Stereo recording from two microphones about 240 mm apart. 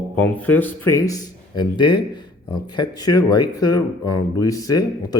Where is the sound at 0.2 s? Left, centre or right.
Centre.